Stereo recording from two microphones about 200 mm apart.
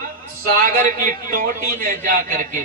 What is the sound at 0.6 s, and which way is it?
Speech, 45° right (ahead or behind).